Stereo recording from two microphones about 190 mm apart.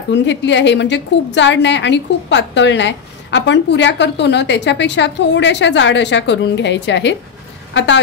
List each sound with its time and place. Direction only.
0.1 s a woman's voice: 70° left (ahead or behind)